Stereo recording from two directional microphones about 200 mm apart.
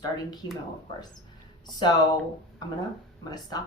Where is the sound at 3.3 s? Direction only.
20° left (ahead or behind).